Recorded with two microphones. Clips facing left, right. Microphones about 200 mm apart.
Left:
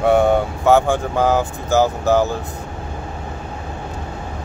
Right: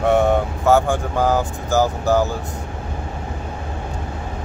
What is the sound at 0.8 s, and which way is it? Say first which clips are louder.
Speech: left 2 dB; 15° left (ahead or behind).